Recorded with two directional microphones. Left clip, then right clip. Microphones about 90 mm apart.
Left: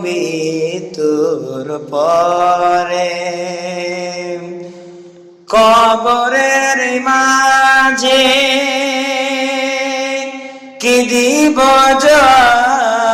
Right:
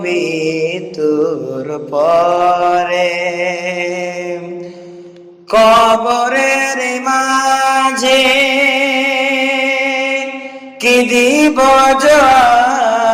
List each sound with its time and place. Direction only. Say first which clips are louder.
0.0 s mantra: right 1 dB; 25° left (ahead or behind)
5.5 s mantra: even; 25° left (ahead or behind)
6.1 s mantra: left 1 dB; 15° left (ahead or behind)
6.6 s mantra: left 3 dB; 40° left (ahead or behind)
7.0 s mantra: left 2 dB; 10° left (ahead or behind)
8.0 s music: even; 30° left (ahead or behind)